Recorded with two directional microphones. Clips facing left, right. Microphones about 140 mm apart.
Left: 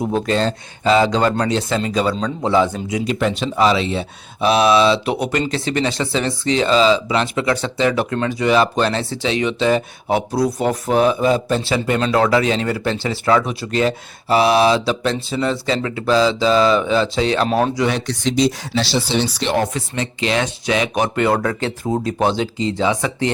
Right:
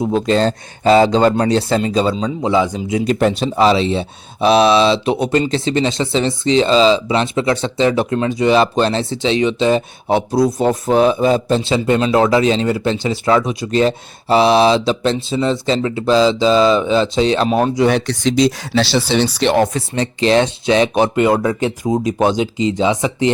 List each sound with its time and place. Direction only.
0.0 s speech: 20° right (ahead or behind)
0.3 s speech: 35° right (ahead or behind)
2.2 s speech: 15° right (ahead or behind)
3.1 s speech: 40° right (ahead or behind); by 17.5 s 20° right (ahead or behind)
17.5 s speech: centre (ahead or behind)
18.0 s speech: 85° right
19.7 s speech: 35° right (ahead or behind); by 23.3 s 20° right (ahead or behind)